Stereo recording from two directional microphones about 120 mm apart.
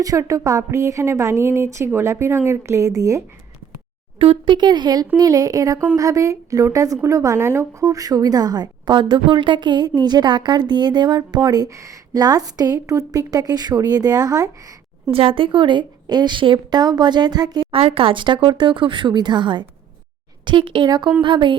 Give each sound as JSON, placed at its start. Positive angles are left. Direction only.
{"t": 0.0, "sound": "speech", "side_deg": -25}
{"t": 4.2, "sound": "speech", "side_deg": -45}
{"t": 15.1, "sound": "speech", "side_deg": -50}
{"t": 17.7, "sound": "speech", "side_deg": -50}